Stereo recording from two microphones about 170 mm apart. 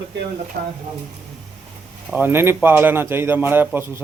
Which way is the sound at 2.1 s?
10° right (ahead or behind).